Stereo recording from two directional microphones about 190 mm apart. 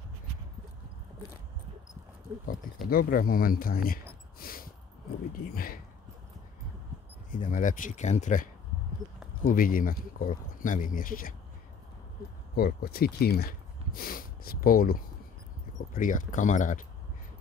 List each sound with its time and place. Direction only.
2.9 s speech: 50° left (ahead or behind)
4.4 s a sound: 50° left (ahead or behind)
5.3 s speech: 50° left (ahead or behind)
7.2 s speech: 45° left (ahead or behind)
12.5 s speech: 55° left (ahead or behind)